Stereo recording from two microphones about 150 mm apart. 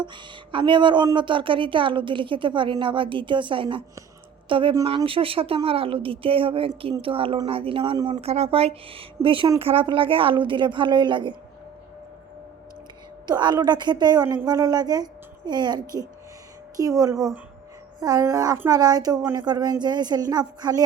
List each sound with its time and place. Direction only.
0.0 s a woman's voice: 30° right (ahead or behind)
8.2 s a woman's voice: 45° right (ahead or behind)
13.2 s a woman's voice: 30° right (ahead or behind)